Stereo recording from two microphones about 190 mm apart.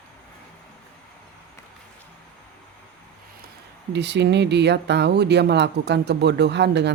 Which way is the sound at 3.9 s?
65° right (ahead or behind).